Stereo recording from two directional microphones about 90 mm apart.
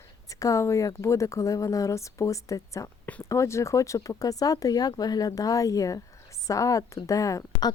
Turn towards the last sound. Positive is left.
turn(degrees=40)  # may be behind; listen again after turning